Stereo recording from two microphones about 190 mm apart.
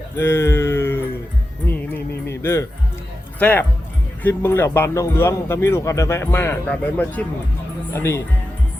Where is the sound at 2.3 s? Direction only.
15° left (ahead or behind).